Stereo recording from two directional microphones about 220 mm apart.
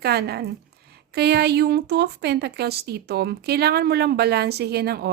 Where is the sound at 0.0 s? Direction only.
45° right (ahead or behind).